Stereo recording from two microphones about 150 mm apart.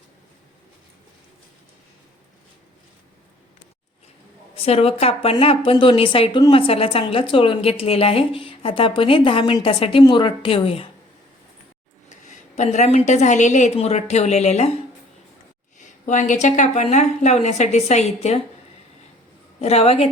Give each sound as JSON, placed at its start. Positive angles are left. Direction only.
{"t": 4.5, "sound": "a woman's voice", "side_deg": 40}
{"t": 12.0, "sound": "a woman's voice", "side_deg": 50}
{"t": 15.8, "sound": "a woman's voice", "side_deg": 55}
{"t": 19.6, "sound": "a woman's voice", "side_deg": 45}